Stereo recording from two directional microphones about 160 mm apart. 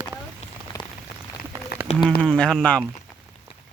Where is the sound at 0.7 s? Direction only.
20° left (ahead or behind).